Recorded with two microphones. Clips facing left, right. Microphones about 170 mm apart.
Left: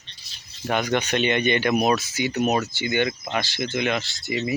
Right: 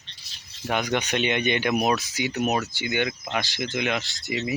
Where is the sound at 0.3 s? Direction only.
90° right.